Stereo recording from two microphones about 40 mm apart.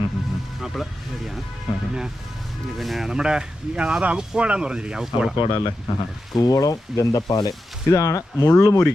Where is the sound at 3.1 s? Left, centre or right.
Centre.